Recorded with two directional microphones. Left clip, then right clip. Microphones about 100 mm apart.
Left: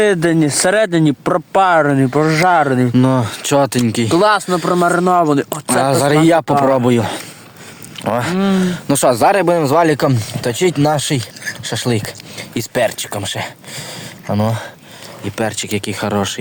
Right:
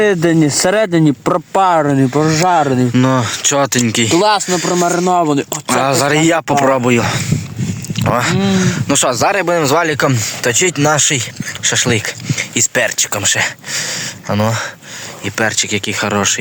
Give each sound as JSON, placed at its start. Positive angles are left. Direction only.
{"t": 0.0, "sound": "speech", "side_deg": -35}
{"t": 1.8, "sound": "speech", "side_deg": -35}
{"t": 2.9, "sound": "speech", "side_deg": 25}
{"t": 4.2, "sound": "speech", "side_deg": 0}
{"t": 4.4, "sound": "speech", "side_deg": 15}
{"t": 6.5, "sound": "speech", "side_deg": 5}
{"t": 6.8, "sound": "speech", "side_deg": 25}
{"t": 12.8, "sound": "speech", "side_deg": 5}